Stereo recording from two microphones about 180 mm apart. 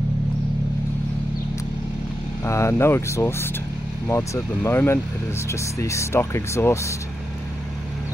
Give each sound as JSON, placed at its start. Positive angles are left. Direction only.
{"t": 2.4, "sound": "speech", "side_deg": 15}